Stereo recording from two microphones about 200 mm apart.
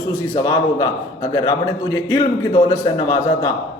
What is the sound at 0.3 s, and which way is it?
A man's voice, 20° left (ahead or behind).